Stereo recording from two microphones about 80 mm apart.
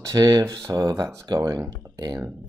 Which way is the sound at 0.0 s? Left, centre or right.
Right.